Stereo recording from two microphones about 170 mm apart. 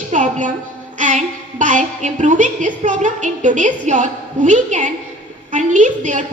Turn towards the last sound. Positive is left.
turn(degrees=-45)  # may be behind; listen again after turning